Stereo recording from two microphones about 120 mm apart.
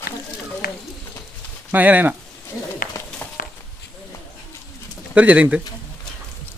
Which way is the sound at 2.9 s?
30° left (ahead or behind).